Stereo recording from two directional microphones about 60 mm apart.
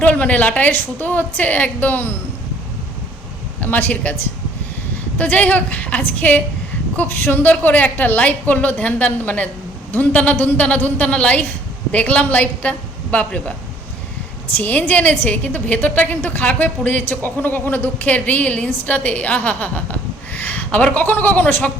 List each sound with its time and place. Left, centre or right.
0.0 s a woman's voice: left
3.6 s speech: left
5.1 s a woman's voice: left
14.5 s a woman's voice: left